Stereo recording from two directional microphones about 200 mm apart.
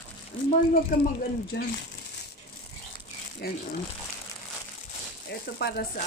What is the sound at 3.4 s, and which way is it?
Speech, 50° left (ahead or behind).